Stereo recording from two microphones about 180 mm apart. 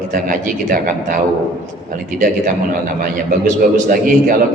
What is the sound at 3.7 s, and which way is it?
Speech, 50° right (ahead or behind).